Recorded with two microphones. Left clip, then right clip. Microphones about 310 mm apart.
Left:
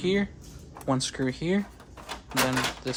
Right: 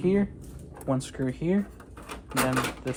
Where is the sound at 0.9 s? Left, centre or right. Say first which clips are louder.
Left 2 dB; centre.